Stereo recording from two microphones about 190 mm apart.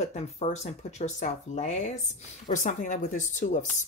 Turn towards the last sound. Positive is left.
turn(degrees=40)  # may be behind; listen again after turning